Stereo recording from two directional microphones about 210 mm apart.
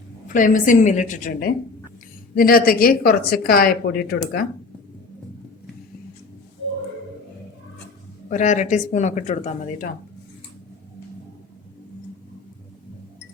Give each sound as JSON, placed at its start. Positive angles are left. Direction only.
{"t": 0.3, "sound": "a woman's voice", "side_deg": 40}
{"t": 8.3, "sound": "speech", "side_deg": 35}